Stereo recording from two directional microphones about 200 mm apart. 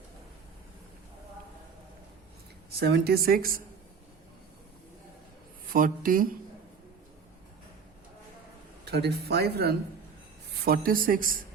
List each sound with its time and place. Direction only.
2.7 s a woman's voice: 55° right (ahead or behind)
5.6 s a woman's voice: 45° right (ahead or behind)
8.8 s a woman's voice: 55° right (ahead or behind)